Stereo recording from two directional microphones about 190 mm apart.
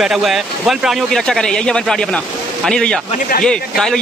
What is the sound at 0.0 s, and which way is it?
Speech, centre (ahead or behind).